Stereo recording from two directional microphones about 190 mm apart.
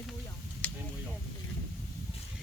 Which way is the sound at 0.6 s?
10° left (ahead or behind).